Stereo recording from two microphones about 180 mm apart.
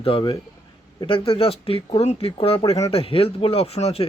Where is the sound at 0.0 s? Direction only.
30° left (ahead or behind).